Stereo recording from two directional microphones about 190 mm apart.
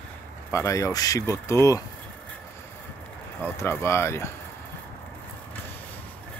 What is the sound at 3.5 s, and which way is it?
Speech, 15° left (ahead or behind).